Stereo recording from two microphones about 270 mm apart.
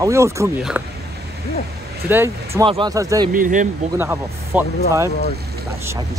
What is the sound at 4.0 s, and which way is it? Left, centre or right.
Speech, centre.